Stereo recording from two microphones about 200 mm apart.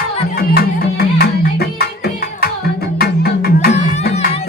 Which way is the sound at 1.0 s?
50° left (ahead or behind).